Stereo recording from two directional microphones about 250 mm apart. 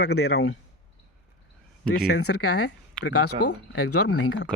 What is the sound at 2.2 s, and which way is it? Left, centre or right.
Speech, left.